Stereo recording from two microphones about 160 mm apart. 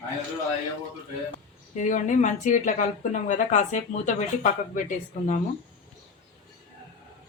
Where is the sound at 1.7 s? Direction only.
50° left (ahead or behind).